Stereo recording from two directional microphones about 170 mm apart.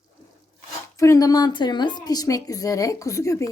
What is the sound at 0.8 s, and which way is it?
Speech, 15° left (ahead or behind).